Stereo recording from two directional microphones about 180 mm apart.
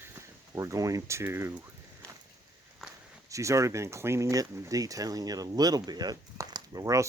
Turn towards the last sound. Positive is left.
turn(degrees=-15)  # may be behind; listen again after turning